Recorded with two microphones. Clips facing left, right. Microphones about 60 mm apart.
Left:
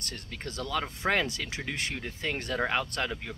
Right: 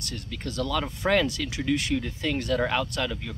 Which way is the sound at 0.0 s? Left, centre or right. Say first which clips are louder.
Right 4 dB; left.